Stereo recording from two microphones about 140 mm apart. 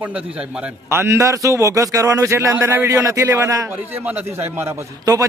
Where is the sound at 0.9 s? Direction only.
20° right (ahead or behind).